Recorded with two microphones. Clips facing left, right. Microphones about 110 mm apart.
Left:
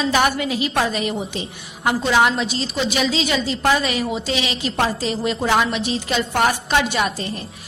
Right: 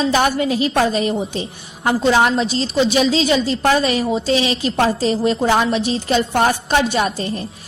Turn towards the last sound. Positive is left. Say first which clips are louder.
# right 3 dB
turn(degrees=-35)  # may be behind; listen again after turning